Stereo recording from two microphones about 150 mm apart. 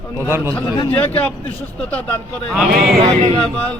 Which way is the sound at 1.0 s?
10° left (ahead or behind).